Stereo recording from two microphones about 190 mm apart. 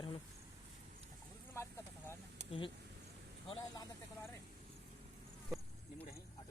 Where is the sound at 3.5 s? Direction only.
20° left (ahead or behind).